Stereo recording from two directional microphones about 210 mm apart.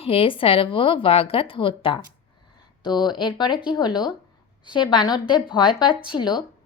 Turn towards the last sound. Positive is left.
turn(degrees=20)  # may be behind; listen again after turning